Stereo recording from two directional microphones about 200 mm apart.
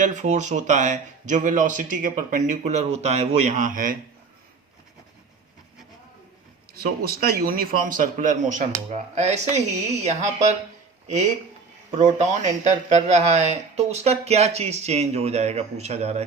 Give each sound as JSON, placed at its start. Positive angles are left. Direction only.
{"t": 0.0, "sound": "speech", "side_deg": -35}
{"t": 6.7, "sound": "a man's voice", "side_deg": -50}
{"t": 11.9, "sound": "speech", "side_deg": -35}